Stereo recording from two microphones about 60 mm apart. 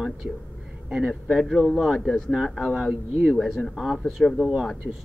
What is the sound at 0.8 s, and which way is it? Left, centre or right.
Speech, centre.